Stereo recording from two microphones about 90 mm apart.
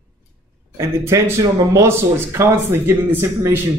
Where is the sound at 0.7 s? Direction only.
30° right (ahead or behind).